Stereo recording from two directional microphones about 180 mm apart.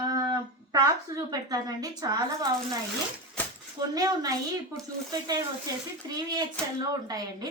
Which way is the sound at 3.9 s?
20° right (ahead or behind).